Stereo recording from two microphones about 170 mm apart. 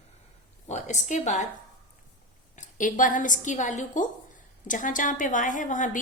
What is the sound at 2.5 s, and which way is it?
A woman's voice, 50° left (ahead or behind).